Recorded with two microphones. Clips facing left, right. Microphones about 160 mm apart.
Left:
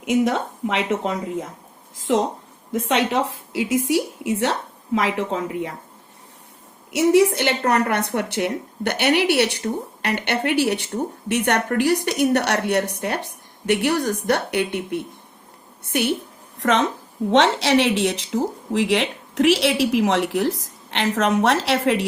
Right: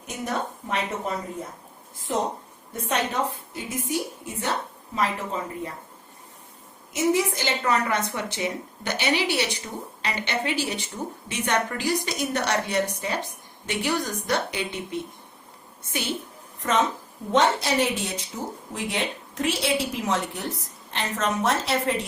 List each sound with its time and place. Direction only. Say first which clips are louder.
0.0 s speech: left 10 dB; 90° left
6.9 s a woman's voice: left 7 dB; 70° left (ahead or behind)
16.6 s a woman's voice: left 4 dB; 80° left